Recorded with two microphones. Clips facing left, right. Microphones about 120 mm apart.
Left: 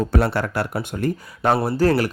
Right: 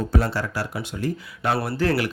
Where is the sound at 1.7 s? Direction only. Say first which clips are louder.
Left 4 dB; 40° left (ahead or behind).